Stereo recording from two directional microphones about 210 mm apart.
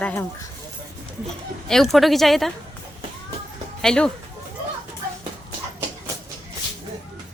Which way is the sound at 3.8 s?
5° left (ahead or behind).